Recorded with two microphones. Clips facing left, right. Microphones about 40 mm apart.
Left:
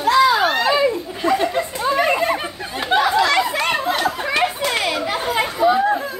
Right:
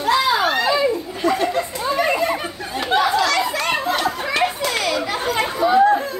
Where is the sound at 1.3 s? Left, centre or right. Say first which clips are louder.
Left 1 dB; left.